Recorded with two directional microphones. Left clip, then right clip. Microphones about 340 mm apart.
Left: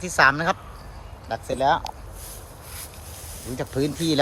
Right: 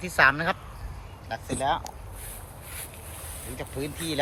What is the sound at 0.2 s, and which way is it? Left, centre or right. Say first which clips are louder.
Speech: left 3 dB; centre.